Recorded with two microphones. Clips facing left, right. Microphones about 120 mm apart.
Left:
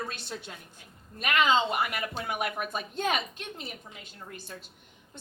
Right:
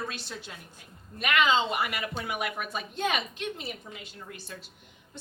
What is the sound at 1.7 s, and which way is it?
A woman's voice, 45° left (ahead or behind).